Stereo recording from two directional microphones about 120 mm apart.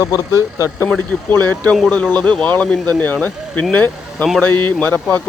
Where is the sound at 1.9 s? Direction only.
10° left (ahead or behind).